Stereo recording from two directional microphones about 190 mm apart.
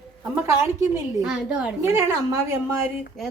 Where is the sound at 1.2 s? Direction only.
5° right (ahead or behind).